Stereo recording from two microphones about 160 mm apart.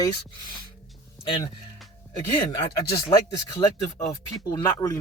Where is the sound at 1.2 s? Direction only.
30° left (ahead or behind).